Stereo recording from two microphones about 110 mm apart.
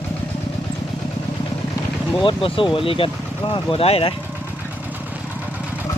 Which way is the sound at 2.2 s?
50° left (ahead or behind).